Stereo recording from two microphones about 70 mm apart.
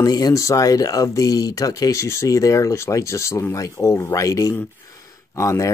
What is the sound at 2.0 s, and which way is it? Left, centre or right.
Speech, left.